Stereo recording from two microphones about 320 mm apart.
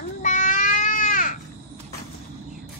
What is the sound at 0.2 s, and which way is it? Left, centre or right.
Baby cry, left.